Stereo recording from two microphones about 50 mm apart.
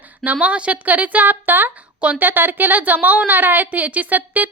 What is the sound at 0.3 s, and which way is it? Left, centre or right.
A woman's voice, right.